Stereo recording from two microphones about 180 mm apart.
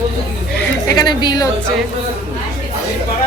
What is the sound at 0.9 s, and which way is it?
Speech, 25° left (ahead or behind).